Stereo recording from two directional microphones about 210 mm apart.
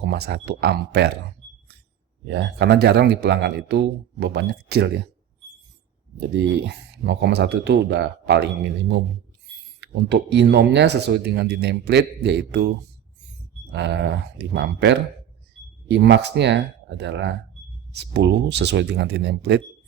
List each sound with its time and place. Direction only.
0.1 s speech: 50° right (ahead or behind)
2.2 s speech: 55° right (ahead or behind)
6.1 s speech: 55° right (ahead or behind)
13.7 s speech: 55° right (ahead or behind)